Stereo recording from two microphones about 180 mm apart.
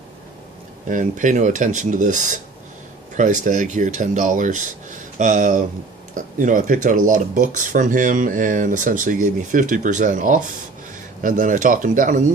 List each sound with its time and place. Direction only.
0.9 s speech: 45° right (ahead or behind)